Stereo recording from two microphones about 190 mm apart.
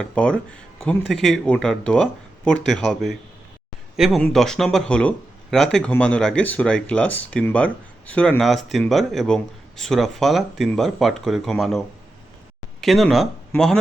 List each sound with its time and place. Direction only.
0.0 s speech: 5° left (ahead or behind)
12.8 s speech: centre (ahead or behind)